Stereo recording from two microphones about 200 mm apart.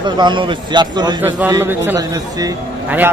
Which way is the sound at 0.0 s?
25° right (ahead or behind).